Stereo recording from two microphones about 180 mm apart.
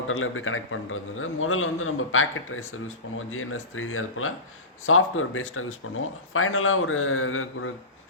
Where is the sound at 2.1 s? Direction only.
90° left.